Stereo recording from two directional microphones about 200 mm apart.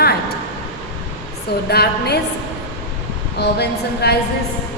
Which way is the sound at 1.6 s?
55° left (ahead or behind).